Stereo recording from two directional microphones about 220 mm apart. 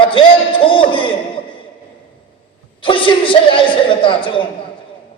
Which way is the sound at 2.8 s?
25° left (ahead or behind).